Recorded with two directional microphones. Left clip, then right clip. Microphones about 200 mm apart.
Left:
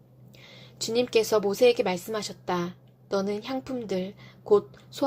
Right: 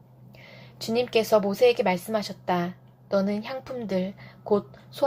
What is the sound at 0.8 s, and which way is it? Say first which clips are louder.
A woman's voice: even; 35° left (ahead or behind).